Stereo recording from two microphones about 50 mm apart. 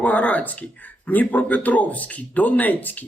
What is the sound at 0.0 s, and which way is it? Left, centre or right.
A man's voice, left.